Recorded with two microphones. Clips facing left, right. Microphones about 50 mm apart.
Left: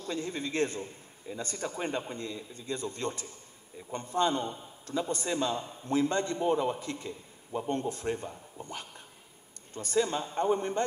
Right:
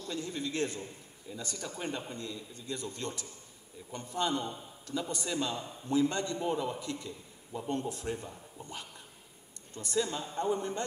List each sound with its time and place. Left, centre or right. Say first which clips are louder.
0.0 s a man's voice: left 2 dB; left
7.5 s a man's voice: left 3 dB; left